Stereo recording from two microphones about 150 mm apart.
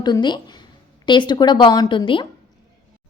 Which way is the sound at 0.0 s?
30° left (ahead or behind).